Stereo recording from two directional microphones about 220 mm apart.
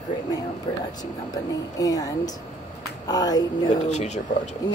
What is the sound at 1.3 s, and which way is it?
Speech, 15° left (ahead or behind).